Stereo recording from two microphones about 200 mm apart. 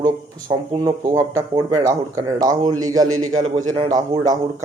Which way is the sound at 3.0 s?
90° right.